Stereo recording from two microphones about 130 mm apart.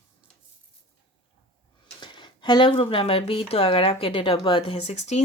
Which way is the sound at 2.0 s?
40° left (ahead or behind).